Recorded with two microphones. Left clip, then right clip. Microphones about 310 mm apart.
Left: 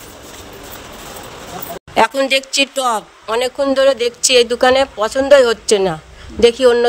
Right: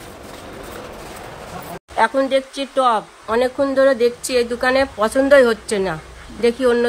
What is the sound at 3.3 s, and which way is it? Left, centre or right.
Speech, left.